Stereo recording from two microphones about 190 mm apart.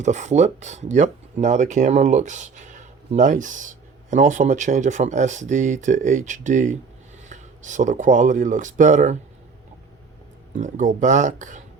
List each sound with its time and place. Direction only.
0.0 s speech: 40° right (ahead or behind)
10.5 s speech: 40° right (ahead or behind)